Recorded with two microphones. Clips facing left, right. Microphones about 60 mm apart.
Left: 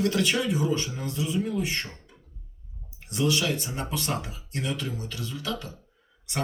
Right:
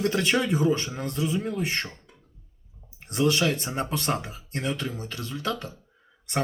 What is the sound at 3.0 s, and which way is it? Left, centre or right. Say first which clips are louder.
Speech: right 2 dB; right.